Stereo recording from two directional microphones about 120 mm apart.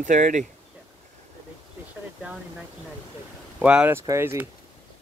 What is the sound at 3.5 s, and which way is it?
Speech, 10° right (ahead or behind).